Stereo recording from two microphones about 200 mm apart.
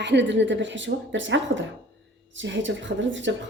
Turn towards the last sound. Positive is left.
turn(degrees=-65)  # may be behind; listen again after turning